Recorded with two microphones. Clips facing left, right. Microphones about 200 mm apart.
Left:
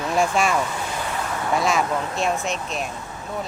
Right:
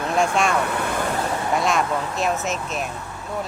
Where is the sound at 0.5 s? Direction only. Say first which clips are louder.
Right 2 dB; 60° right (ahead or behind).